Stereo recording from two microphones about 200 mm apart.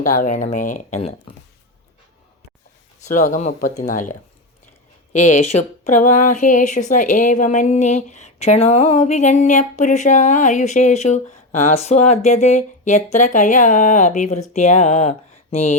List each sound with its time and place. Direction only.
0.0 s speech: 40° left (ahead or behind)
3.0 s speech: 40° left (ahead or behind)